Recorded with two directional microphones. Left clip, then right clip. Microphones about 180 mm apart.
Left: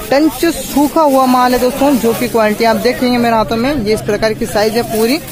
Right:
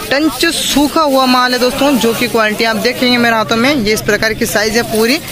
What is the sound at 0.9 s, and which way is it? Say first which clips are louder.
Speech: left 3 dB; 20° right (ahead or behind).